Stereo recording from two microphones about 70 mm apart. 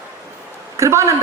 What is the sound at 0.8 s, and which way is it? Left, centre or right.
Speech, right.